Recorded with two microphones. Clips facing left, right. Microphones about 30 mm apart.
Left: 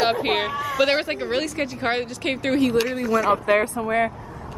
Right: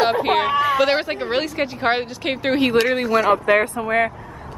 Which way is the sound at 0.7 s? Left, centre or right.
Centre.